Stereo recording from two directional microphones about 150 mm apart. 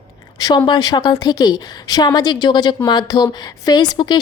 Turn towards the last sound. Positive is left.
turn(degrees=30)  # may be behind; listen again after turning